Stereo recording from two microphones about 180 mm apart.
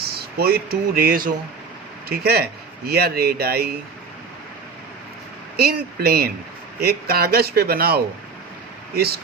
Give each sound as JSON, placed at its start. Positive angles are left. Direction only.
{"t": 0.0, "sound": "speech", "side_deg": -60}
{"t": 5.5, "sound": "speech", "side_deg": -60}